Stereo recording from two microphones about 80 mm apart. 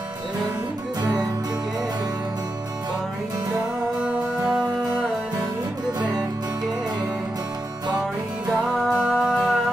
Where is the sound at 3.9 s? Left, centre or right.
Centre.